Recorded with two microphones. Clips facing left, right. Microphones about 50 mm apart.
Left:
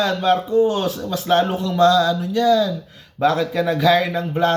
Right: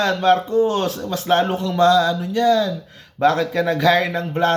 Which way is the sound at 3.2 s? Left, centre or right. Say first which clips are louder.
Right 1 dB; right.